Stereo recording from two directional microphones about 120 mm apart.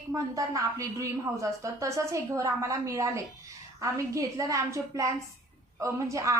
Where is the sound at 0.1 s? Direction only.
25° right (ahead or behind).